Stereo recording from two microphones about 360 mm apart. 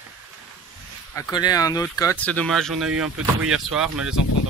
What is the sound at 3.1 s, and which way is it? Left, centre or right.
Speech, right.